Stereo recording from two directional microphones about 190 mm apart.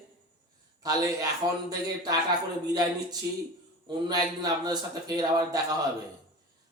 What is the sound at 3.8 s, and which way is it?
Speech, 20° right (ahead or behind).